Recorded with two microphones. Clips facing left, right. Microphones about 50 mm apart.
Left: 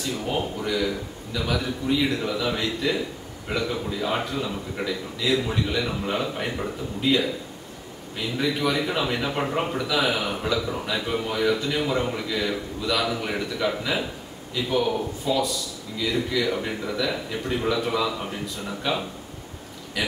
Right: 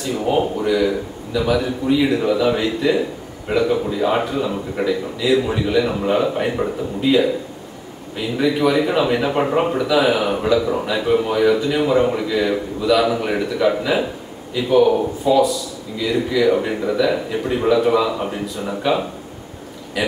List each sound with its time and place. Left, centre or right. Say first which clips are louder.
0.0 s a man's voice: right 8 dB; centre